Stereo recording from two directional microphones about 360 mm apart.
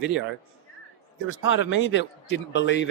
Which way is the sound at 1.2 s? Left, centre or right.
Left.